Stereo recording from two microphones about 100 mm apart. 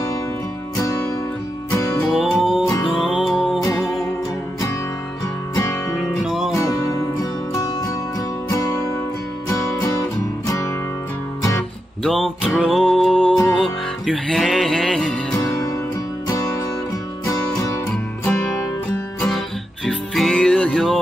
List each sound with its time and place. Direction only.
2.0 s music: centre (ahead or behind)
5.5 s music: 35° left (ahead or behind)
6.2 s music: centre (ahead or behind)
6.6 s music: 35° left (ahead or behind)
12.0 s music: centre (ahead or behind)
19.3 s music: 5° left (ahead or behind)